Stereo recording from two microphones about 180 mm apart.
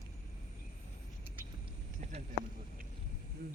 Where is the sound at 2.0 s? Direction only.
35° right (ahead or behind).